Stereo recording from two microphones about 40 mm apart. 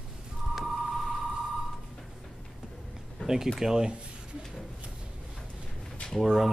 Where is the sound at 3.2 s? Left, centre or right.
Left.